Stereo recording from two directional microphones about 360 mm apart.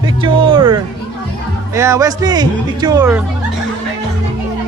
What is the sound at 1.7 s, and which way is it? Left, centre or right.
A man's voice, centre.